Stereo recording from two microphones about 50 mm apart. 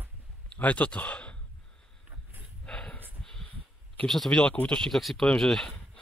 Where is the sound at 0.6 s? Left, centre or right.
Left.